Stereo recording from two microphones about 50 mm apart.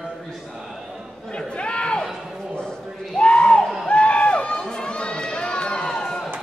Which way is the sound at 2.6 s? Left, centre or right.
Centre.